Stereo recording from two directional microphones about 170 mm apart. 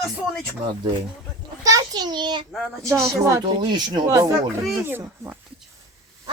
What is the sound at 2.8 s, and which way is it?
Speech, 15° right (ahead or behind).